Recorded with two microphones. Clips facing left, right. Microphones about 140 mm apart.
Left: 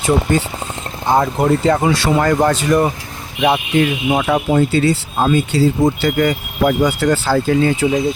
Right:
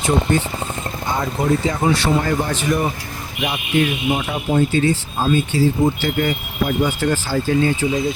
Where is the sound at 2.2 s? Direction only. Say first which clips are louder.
Left 6 dB; 80° left.